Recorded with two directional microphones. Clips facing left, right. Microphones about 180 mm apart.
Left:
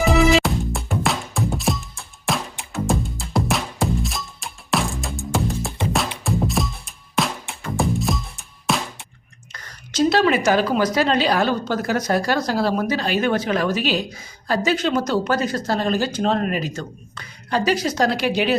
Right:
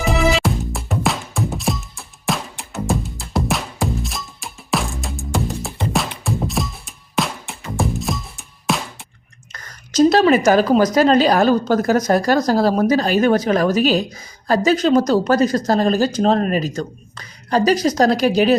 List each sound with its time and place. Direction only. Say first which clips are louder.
0.0 s music: left 2 dB; centre (ahead or behind)
9.5 s a sound: right 1 dB; 45° right (ahead or behind)
10.9 s a woman's voice: right 5 dB; 40° right (ahead or behind)